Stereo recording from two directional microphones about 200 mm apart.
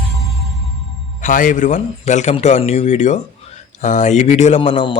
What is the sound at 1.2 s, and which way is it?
Speech, 40° left (ahead or behind).